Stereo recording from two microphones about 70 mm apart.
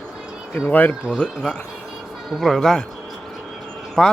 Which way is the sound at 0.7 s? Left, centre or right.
Left.